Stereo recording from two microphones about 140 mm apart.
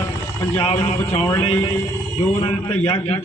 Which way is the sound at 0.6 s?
50° left (ahead or behind).